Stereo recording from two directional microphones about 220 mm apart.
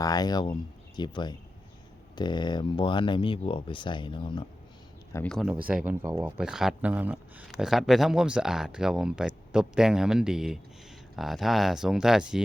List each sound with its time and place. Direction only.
0.0 s speech: 15° left (ahead or behind)
5.1 s speech: 5° left (ahead or behind)